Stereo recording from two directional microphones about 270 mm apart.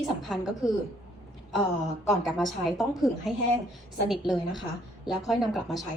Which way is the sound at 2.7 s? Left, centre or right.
Centre.